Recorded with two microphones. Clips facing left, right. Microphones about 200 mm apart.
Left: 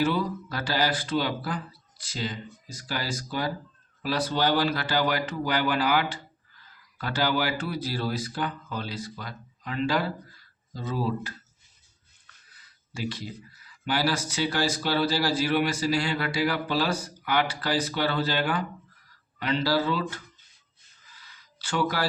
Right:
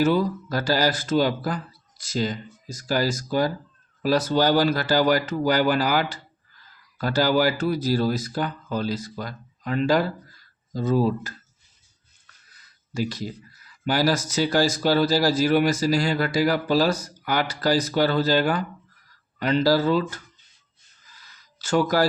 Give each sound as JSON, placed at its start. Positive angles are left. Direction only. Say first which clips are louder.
{"t": 0.0, "sound": "speech", "louder": "right 5 dB", "side_deg": -45}
{"t": 12.5, "sound": "speech", "louder": "right 8 dB", "side_deg": -40}
{"t": 21.2, "sound": "a sound", "louder": "even", "side_deg": -45}